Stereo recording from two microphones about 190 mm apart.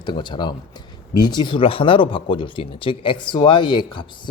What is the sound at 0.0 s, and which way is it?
Speech, 25° left (ahead or behind).